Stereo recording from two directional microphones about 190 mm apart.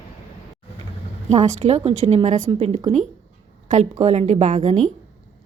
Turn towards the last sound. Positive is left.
turn(degrees=-40)  # may be behind; listen again after turning